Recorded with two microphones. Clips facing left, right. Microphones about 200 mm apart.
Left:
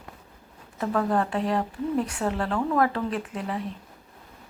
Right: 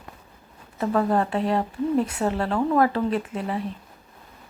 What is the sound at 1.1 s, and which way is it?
Speech, centre (ahead or behind).